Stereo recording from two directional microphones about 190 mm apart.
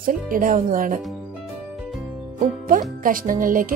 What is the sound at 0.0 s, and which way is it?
Speech, 45° right (ahead or behind).